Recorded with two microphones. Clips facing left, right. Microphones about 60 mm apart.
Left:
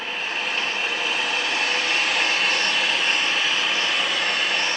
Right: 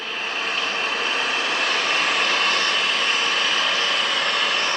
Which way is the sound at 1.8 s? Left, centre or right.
Right.